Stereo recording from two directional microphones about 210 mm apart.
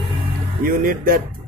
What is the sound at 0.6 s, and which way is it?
Speech, 45° right (ahead or behind).